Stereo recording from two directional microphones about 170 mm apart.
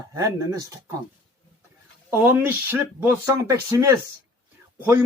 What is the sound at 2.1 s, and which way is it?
Speech, 15° right (ahead or behind).